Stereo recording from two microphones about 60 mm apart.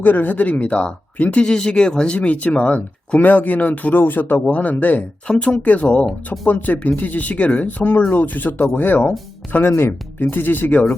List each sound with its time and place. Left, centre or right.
0.0 s speech: left
5.3 s speech: centre
6.1 s speech: centre
6.5 s speech: left